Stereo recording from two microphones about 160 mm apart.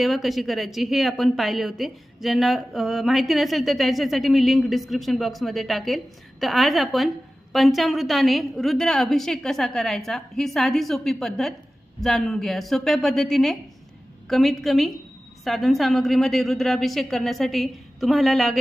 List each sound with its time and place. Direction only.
0.0 s speech: centre (ahead or behind)